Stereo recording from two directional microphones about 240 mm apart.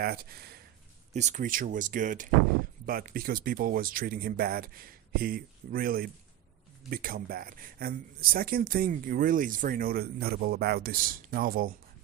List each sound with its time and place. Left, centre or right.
0.0 s speech: right
1.1 s speech: right